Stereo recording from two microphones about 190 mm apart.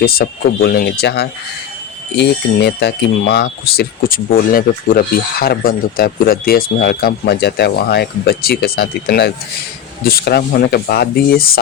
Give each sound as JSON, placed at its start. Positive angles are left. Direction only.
{"t": 0.0, "sound": "speech", "side_deg": 50}